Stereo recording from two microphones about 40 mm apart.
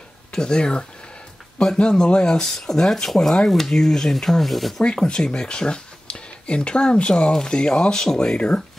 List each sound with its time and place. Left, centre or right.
0.3 s speech: centre
4.8 s speech: left
8.4 s speech: left